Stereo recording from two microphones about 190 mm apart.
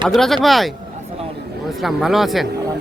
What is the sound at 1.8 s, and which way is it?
Speech, centre (ahead or behind).